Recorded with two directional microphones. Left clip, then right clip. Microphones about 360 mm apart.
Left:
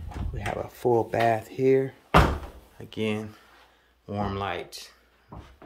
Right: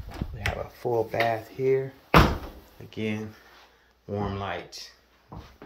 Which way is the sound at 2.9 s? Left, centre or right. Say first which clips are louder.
Left 3 dB; centre.